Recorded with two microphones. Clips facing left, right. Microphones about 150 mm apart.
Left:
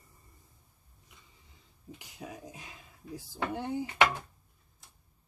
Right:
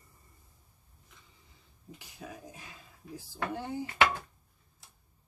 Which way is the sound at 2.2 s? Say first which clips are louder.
Left 1 dB; 15° left (ahead or behind).